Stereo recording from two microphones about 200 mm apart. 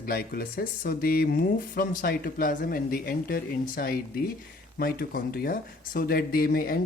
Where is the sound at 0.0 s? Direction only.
50° left (ahead or behind).